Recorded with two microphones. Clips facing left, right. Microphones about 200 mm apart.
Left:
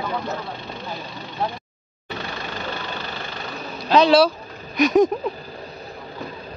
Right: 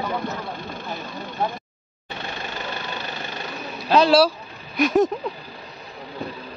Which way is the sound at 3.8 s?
5° right (ahead or behind).